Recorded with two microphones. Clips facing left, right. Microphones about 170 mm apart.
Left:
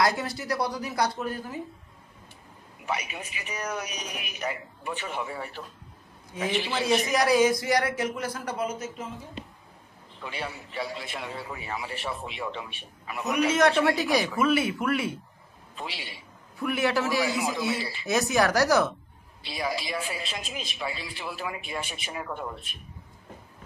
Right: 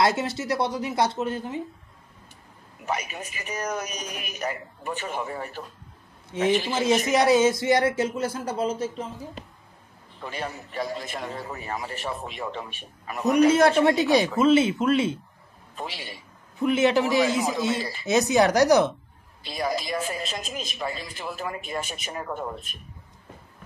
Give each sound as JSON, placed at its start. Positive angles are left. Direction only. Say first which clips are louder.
{"t": 0.0, "sound": "speech", "louder": "right 3 dB", "side_deg": -25}
{"t": 2.8, "sound": "a woman's voice", "louder": "right 2 dB", "side_deg": -45}
{"t": 7.1, "sound": "speech", "louder": "right 3 dB", "side_deg": -25}
{"t": 10.2, "sound": "a woman's voice", "louder": "right 3 dB", "side_deg": -45}
{"t": 13.8, "sound": "speech", "louder": "right 4 dB", "side_deg": -20}
{"t": 15.7, "sound": "a woman's voice", "louder": "right 3 dB", "side_deg": -45}
{"t": 16.5, "sound": "speech", "louder": "right 5 dB", "side_deg": -20}
{"t": 19.4, "sound": "a woman's voice", "louder": "right 3 dB", "side_deg": -45}